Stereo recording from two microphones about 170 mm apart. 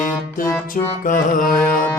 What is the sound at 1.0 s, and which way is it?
Carnatic music, 55° left (ahead or behind).